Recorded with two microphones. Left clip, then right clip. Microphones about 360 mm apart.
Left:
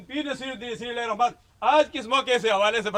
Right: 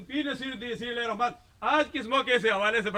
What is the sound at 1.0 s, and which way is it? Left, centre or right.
A man's voice, centre.